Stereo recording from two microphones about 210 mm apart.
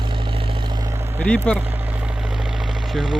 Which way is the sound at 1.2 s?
5° left (ahead or behind).